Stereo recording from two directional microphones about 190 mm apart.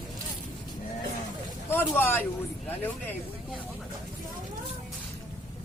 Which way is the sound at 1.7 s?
10° left (ahead or behind).